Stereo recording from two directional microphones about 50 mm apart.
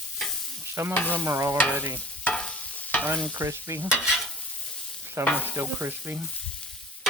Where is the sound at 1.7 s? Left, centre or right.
Right.